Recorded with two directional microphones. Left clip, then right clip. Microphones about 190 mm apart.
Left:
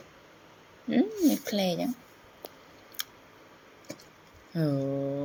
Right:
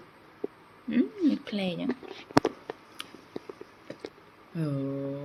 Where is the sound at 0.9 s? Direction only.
25° left (ahead or behind).